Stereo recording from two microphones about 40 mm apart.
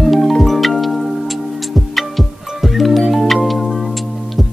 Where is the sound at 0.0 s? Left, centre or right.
Centre.